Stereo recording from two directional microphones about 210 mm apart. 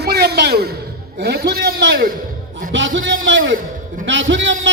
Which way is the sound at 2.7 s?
60° right (ahead or behind).